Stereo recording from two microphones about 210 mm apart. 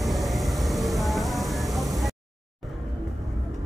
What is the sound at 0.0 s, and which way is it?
Vehicle, centre (ahead or behind).